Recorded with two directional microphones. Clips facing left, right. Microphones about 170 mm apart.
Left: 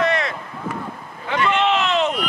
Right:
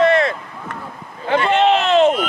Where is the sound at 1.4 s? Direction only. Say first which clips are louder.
Right 3 dB; 35° right (ahead or behind).